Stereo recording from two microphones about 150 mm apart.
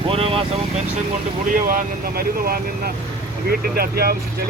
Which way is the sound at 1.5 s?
70° right (ahead or behind).